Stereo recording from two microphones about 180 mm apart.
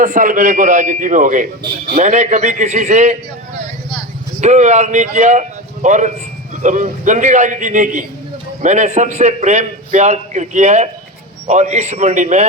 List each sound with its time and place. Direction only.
0.0 s a man's voice: 50° right (ahead or behind)
4.4 s a man's voice: 40° right (ahead or behind)